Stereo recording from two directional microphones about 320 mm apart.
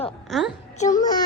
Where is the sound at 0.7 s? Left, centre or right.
Left.